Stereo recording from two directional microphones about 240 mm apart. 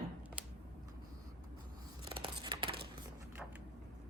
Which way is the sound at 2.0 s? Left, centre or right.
Centre.